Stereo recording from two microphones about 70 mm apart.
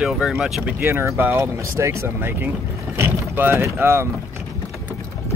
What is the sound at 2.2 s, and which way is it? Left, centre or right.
Speech, right.